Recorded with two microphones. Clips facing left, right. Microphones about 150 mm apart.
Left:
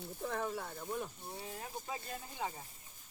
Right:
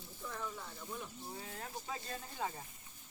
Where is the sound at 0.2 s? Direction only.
55° left (ahead or behind).